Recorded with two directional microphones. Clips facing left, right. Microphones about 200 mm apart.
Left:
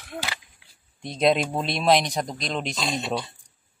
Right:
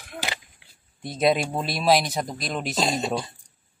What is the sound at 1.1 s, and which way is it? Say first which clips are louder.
Speech: left 1 dB; 5° right (ahead or behind).